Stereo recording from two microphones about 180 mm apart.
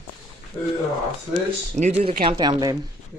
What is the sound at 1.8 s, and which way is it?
Speech, 30° right (ahead or behind).